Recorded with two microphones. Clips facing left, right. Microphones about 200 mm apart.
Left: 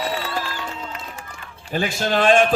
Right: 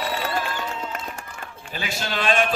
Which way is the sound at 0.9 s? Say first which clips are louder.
Right 3 dB; 50° right (ahead or behind).